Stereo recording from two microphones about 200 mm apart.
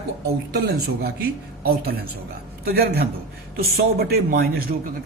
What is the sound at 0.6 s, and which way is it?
A man's voice, 50° right (ahead or behind).